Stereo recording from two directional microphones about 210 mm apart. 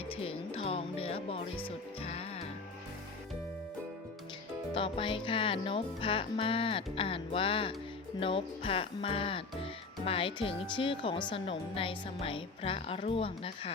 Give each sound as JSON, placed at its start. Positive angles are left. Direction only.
{"t": 0.1, "sound": "music", "side_deg": 25}
{"t": 4.7, "sound": "music", "side_deg": 25}